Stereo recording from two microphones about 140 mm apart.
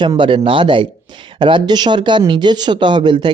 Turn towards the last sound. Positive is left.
turn(degrees=-35)  # may be behind; listen again after turning